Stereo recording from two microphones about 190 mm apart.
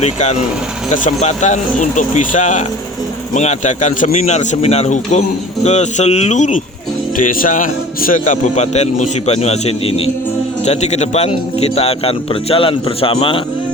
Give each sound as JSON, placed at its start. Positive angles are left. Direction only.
{"t": 0.0, "sound": "a man's voice", "side_deg": 35}